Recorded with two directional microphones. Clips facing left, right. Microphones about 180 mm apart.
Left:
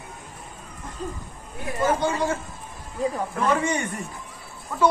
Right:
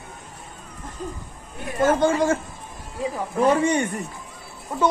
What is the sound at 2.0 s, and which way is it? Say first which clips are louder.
Speech: right 5 dB; 50° right (ahead or behind).